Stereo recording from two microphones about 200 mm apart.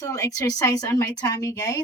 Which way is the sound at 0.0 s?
15° left (ahead or behind).